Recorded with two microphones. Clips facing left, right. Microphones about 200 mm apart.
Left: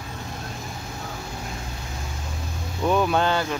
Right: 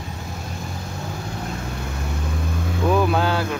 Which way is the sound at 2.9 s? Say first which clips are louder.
Right 1 dB; centre (ahead or behind).